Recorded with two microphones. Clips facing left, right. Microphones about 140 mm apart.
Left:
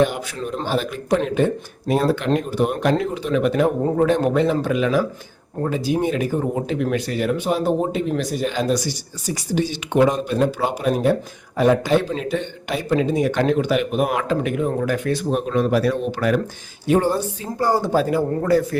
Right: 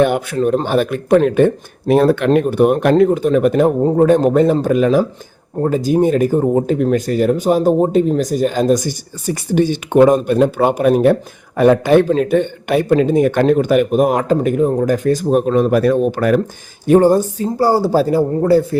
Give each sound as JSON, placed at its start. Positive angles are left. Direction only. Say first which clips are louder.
{"t": 0.0, "sound": "speech", "louder": "right 6 dB", "side_deg": -60}